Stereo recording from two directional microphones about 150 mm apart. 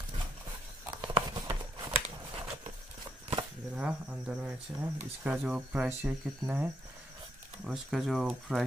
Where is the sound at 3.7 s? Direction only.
5° right (ahead or behind).